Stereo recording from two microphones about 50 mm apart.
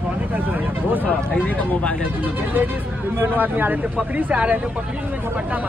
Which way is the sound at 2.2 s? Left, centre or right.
Right.